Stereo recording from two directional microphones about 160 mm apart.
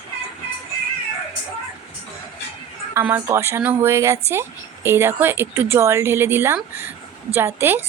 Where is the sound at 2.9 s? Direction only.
15° right (ahead or behind).